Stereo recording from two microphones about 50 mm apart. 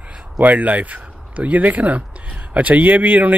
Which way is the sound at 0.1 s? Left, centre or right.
Right.